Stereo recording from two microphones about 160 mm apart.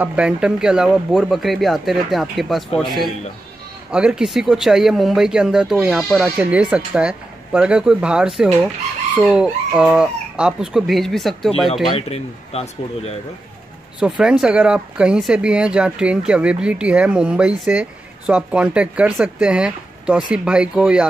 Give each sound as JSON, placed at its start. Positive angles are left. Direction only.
{"t": 0.0, "sound": "speech", "side_deg": -5}
{"t": 11.9, "sound": "speech", "side_deg": 40}
{"t": 13.9, "sound": "speech", "side_deg": -5}